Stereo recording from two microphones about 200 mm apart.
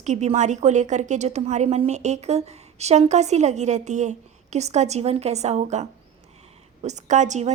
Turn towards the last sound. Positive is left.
turn(degrees=-35)  # may be behind; listen again after turning